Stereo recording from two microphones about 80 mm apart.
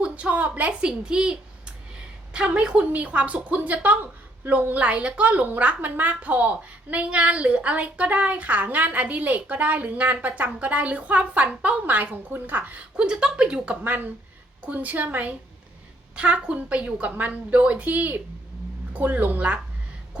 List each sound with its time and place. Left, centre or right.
0.0 s a woman's voice: centre
13.8 s a woman's voice: right